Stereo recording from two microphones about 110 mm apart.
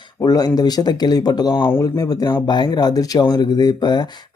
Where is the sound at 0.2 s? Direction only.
35° left (ahead or behind).